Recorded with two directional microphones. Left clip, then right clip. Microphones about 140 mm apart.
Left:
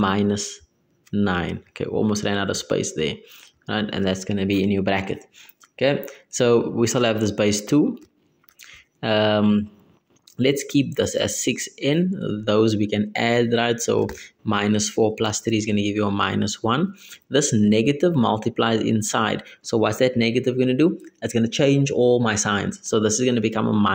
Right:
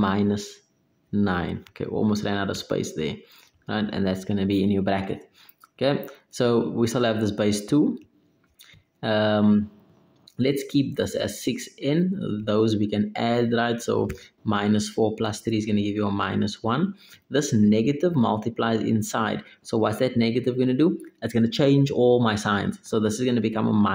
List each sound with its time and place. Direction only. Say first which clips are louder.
0.0 s speech: left 3 dB; 20° left (ahead or behind)
8.5 s a sound: left 5 dB; 25° left (ahead or behind)
10.3 s speech: left 3 dB; 25° left (ahead or behind)